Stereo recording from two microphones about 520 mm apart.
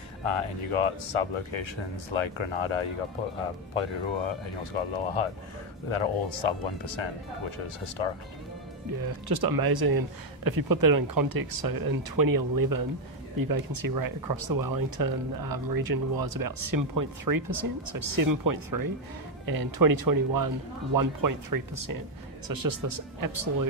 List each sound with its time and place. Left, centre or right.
0.2 s speech: left
9.0 s speech: right